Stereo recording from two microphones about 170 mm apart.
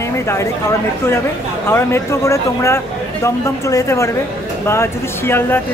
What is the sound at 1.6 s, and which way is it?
A woman's voice, 15° left (ahead or behind).